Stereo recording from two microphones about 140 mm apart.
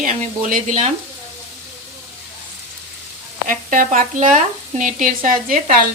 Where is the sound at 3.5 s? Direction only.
70° right (ahead or behind).